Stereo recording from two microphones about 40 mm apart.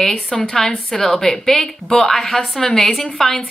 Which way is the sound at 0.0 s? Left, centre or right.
Centre.